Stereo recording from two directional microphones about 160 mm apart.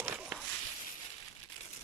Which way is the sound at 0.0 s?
10° right (ahead or behind).